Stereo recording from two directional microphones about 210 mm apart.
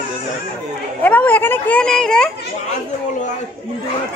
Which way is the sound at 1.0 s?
5° left (ahead or behind).